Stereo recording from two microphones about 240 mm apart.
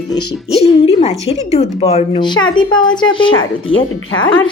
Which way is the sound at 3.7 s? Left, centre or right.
Left.